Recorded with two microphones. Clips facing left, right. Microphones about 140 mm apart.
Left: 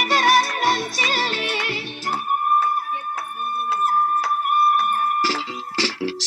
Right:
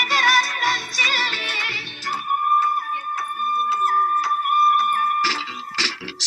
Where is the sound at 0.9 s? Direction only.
50° left (ahead or behind).